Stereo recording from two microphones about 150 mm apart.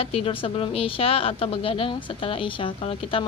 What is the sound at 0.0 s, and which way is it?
Speech, 40° left (ahead or behind).